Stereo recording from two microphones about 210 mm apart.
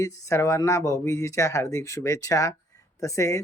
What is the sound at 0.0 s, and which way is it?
Speech, 15° left (ahead or behind).